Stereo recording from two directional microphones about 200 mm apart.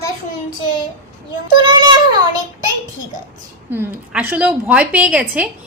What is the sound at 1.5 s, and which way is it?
Speech, 20° right (ahead or behind).